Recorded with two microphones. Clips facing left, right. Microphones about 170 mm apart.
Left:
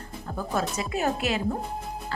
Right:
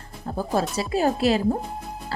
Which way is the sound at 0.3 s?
35° right (ahead or behind).